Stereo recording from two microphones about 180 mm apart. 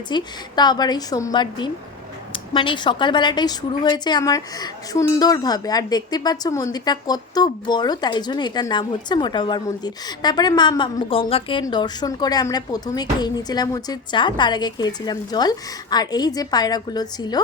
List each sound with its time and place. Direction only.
0.1 s a woman's voice: 25° left (ahead or behind)